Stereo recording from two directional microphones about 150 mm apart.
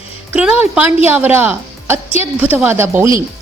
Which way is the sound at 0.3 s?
10° right (ahead or behind).